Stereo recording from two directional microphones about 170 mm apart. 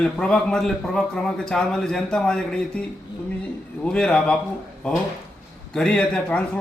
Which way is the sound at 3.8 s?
5° left (ahead or behind).